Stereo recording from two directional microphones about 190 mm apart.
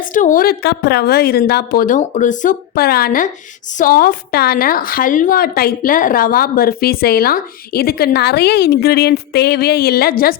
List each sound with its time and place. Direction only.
0.0 s a woman's voice: 45° left (ahead or behind)